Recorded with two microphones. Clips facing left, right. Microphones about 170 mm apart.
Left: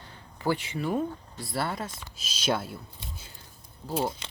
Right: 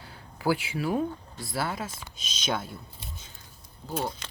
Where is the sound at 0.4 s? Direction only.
5° right (ahead or behind).